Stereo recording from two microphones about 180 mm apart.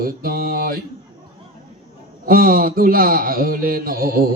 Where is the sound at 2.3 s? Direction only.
55° right (ahead or behind).